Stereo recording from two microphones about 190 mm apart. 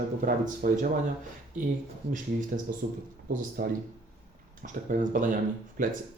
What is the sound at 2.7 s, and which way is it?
Speech, 50° right (ahead or behind).